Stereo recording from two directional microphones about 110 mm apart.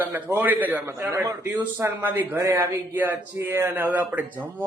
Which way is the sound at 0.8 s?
25° right (ahead or behind).